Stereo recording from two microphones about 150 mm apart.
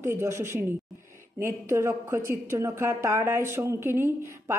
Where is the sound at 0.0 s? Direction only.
15° right (ahead or behind).